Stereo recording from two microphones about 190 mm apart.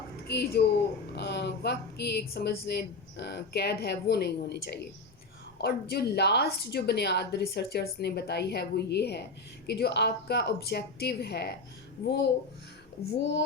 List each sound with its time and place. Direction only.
0.3 s speech: 55° left (ahead or behind)